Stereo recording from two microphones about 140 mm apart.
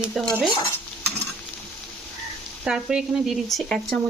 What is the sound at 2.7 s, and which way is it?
Speech, 5° right (ahead or behind).